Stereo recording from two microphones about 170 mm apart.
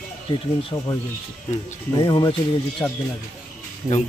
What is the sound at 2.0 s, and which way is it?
Speech, 20° left (ahead or behind).